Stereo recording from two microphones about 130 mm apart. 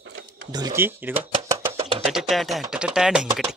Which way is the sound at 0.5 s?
30° right (ahead or behind).